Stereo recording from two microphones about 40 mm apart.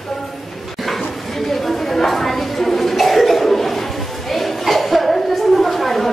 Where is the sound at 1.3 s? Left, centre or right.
Centre.